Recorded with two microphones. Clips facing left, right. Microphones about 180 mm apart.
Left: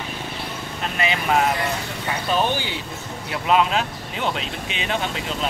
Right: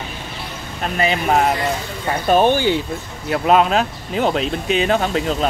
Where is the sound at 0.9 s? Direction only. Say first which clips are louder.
Right 4 dB; 40° right (ahead or behind).